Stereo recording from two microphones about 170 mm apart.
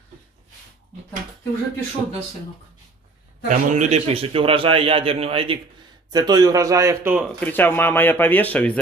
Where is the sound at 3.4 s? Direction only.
45° right (ahead or behind); by 7.3 s 10° right (ahead or behind).